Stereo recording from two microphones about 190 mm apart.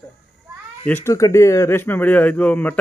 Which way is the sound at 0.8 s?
15° left (ahead or behind).